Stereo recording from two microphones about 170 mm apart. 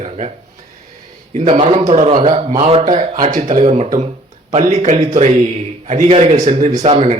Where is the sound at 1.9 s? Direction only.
45° right (ahead or behind).